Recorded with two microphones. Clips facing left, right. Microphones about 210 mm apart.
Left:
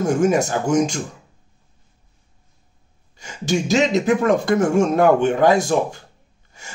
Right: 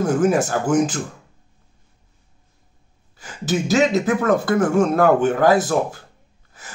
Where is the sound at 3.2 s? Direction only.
5° right (ahead or behind).